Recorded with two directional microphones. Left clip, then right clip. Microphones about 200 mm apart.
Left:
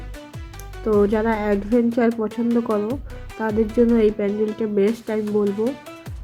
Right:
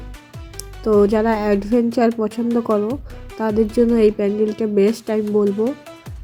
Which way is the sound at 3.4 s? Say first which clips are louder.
Right 2 dB; 25° right (ahead or behind).